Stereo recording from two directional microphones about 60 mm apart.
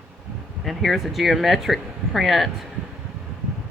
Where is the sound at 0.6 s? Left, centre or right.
Centre.